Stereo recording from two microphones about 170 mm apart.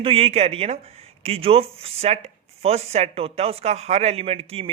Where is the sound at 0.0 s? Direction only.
35° right (ahead or behind).